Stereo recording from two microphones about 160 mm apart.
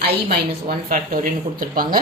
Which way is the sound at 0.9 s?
60° right (ahead or behind).